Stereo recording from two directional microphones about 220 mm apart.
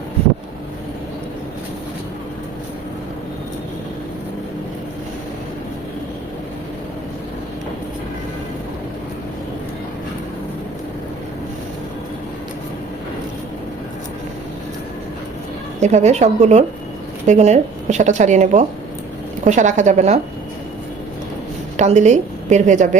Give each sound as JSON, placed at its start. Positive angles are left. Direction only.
{"t": 15.8, "sound": "speech", "side_deg": -30}
{"t": 21.8, "sound": "a woman's voice", "side_deg": -30}